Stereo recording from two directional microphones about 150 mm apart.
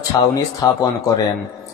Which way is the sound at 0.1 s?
25° left (ahead or behind).